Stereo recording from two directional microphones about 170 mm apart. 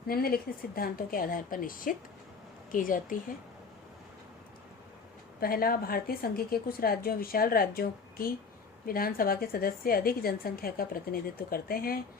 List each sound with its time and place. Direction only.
0.1 s a woman's voice: 60° left (ahead or behind)
5.4 s a woman's voice: 60° left (ahead or behind)